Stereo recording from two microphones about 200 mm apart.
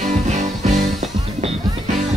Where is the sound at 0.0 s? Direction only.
35° right (ahead or behind).